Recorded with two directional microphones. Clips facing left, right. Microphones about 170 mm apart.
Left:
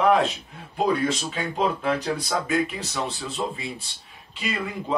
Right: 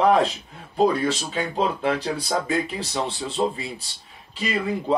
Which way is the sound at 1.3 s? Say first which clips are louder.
Right 1 dB; 30° right (ahead or behind).